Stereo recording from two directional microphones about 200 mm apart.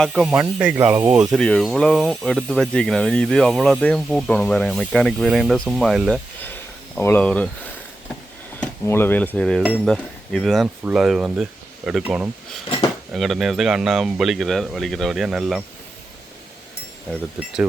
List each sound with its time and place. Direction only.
0.0 s speech: centre (ahead or behind)
8.6 s speech: 10° left (ahead or behind)
17.1 s speech: 5° right (ahead or behind)